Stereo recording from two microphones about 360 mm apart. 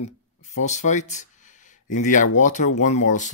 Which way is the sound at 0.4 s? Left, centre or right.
Centre.